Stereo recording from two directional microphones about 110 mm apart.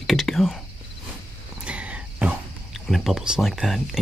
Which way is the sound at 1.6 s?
10° right (ahead or behind).